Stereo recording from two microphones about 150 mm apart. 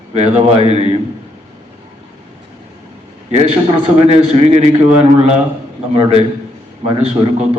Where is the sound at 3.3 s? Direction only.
40° right (ahead or behind).